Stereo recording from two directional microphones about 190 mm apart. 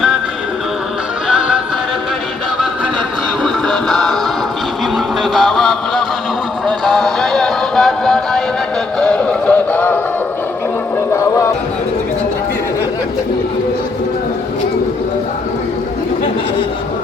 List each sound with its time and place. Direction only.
1.3 s music: 5° right (ahead or behind)
3.4 s music: centre (ahead or behind)
5.3 s music: centre (ahead or behind)
11.1 s music: 15° left (ahead or behind)